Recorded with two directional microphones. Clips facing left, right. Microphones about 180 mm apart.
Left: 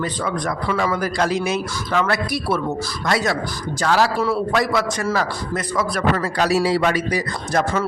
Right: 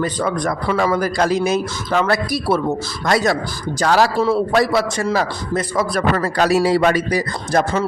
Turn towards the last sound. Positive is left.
turn(degrees=-40)  # may be behind; listen again after turning